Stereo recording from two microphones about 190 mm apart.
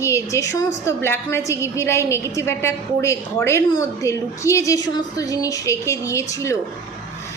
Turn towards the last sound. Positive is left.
turn(degrees=15)  # may be behind; listen again after turning